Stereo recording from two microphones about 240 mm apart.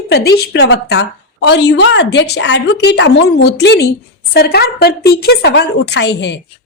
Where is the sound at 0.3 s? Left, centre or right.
Left.